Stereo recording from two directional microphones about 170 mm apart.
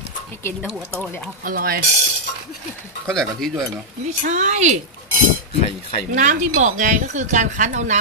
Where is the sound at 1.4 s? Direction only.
60° right (ahead or behind).